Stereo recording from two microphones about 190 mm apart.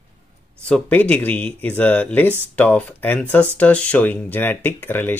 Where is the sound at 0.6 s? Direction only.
5° left (ahead or behind).